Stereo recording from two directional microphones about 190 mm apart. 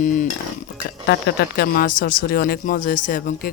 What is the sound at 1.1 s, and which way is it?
Speech, 55° left (ahead or behind).